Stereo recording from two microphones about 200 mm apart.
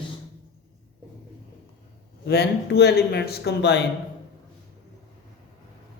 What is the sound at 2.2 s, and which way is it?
A man's voice, 55° left (ahead or behind).